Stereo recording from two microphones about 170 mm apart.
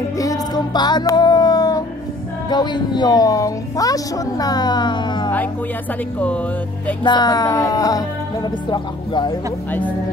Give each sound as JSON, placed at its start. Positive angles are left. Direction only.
{"t": 0.2, "sound": "music", "side_deg": 20}
{"t": 2.5, "sound": "a woman's voice", "side_deg": 25}
{"t": 6.1, "sound": "speech", "side_deg": 10}
{"t": 7.0, "sound": "a woman's voice", "side_deg": 25}
{"t": 9.7, "sound": "speech", "side_deg": 10}